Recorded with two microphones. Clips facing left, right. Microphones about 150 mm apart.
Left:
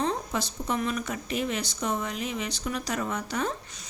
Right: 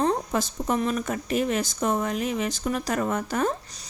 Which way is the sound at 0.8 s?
45° right (ahead or behind).